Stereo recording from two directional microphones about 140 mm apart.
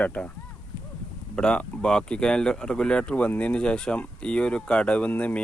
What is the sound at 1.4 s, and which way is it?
Speech, 5° left (ahead or behind).